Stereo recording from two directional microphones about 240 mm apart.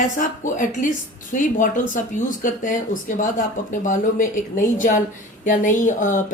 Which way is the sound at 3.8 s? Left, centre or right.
Left.